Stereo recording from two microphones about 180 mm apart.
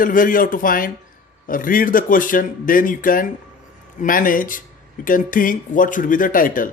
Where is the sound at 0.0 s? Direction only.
50° left (ahead or behind).